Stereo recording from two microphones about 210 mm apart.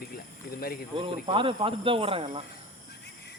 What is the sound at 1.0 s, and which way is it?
Speech, 25° right (ahead or behind).